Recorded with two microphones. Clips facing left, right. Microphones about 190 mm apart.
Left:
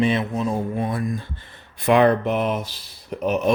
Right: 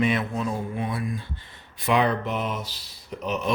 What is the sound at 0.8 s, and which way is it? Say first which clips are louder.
Speech: left 4 dB; 45° left (ahead or behind).